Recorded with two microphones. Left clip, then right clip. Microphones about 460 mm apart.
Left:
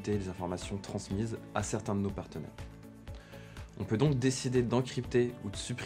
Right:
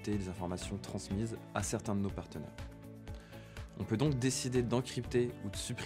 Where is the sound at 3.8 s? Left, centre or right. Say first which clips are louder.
Left 4 dB; right.